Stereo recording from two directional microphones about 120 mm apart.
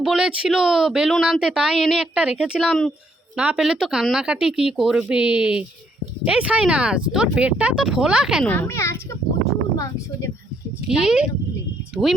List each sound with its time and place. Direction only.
0.0 s speech: 5° right (ahead or behind)
3.3 s speech: 10° right (ahead or behind)
8.4 s speech: 15° left (ahead or behind)
10.8 s speech: 5° right (ahead or behind)